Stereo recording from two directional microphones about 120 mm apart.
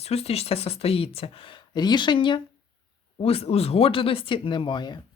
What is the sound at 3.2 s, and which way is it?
Speech, 55° left (ahead or behind).